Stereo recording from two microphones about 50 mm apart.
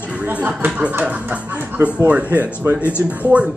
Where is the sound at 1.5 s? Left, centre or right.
Right.